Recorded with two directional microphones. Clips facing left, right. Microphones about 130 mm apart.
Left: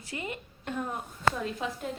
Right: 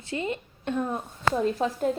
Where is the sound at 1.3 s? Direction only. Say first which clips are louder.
Right 8 dB; 40° right (ahead or behind).